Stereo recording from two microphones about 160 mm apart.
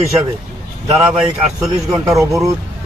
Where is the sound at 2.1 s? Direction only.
20° right (ahead or behind).